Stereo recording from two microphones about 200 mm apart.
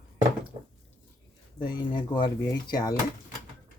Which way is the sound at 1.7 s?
25° left (ahead or behind).